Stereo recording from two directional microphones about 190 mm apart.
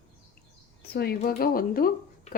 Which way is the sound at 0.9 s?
55° left (ahead or behind).